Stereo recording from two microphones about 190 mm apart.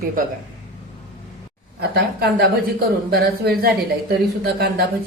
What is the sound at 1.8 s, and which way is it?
A woman's voice, 60° right (ahead or behind).